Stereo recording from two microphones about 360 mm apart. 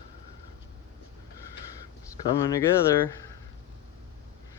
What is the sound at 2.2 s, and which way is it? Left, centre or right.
Speech, centre.